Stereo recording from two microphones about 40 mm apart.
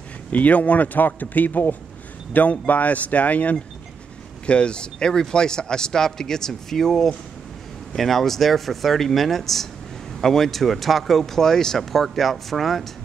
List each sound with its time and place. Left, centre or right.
0.3 s speech: left
4.5 s speech: left; by 12.8 s centre